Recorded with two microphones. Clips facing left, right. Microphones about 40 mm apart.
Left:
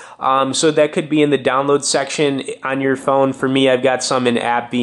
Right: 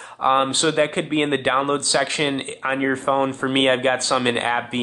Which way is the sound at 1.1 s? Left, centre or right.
Centre.